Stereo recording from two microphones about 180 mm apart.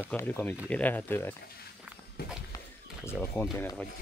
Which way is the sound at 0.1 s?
10° left (ahead or behind).